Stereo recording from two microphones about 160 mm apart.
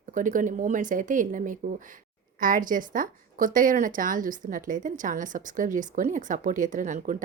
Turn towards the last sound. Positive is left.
turn(degrees=-55)  # may be behind; listen again after turning